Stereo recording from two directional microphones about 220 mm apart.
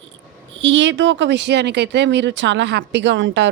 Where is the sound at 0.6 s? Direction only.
55° right (ahead or behind).